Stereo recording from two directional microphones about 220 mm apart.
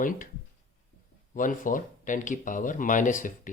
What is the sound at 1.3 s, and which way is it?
Speech, 35° left (ahead or behind).